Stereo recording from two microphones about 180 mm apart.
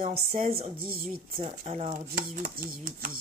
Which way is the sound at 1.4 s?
35° right (ahead or behind).